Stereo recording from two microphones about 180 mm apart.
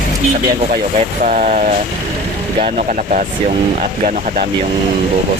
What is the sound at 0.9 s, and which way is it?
Speech, 45° right (ahead or behind).